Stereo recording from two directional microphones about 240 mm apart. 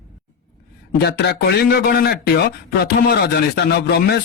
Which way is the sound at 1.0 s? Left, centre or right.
Left.